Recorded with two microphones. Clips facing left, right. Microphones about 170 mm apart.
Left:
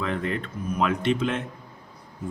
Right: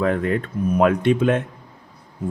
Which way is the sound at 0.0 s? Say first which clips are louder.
Right 7 dB; 50° right (ahead or behind).